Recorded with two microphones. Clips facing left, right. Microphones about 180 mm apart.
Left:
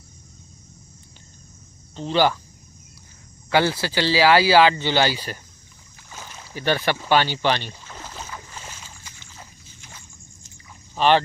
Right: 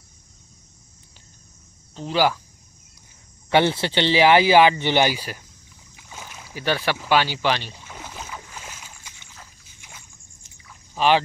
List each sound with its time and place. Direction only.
2.0 s speech: 5° right (ahead or behind)
3.4 s speech: 25° right (ahead or behind)
5.9 s rowboat: 5° right (ahead or behind)
11.0 s speech: 5° right (ahead or behind)